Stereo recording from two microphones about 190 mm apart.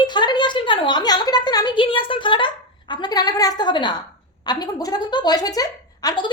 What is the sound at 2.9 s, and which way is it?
A woman's voice, 20° left (ahead or behind).